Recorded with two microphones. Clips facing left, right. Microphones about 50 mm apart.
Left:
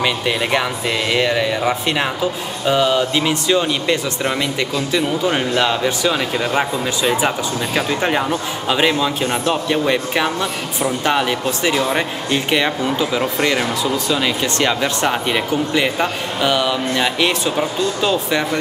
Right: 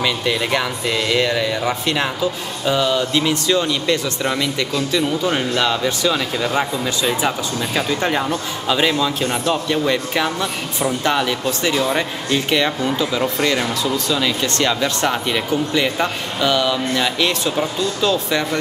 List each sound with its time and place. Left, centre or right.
0.0 s speech: left
9.2 s speech: centre
9.7 s speech: centre